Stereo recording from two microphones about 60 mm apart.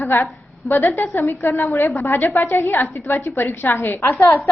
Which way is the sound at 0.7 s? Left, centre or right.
Left.